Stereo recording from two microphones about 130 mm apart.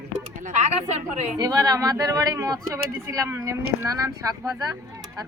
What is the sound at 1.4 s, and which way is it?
Speech, 30° right (ahead or behind).